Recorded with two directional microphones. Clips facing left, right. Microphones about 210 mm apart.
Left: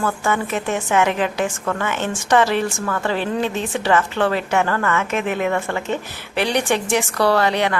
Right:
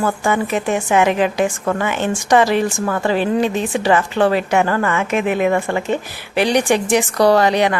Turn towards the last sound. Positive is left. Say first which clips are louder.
# right 4 dB
turn(degrees=-15)  # may be behind; listen again after turning